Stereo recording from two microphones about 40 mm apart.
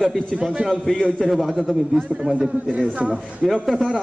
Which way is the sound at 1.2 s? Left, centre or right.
Centre.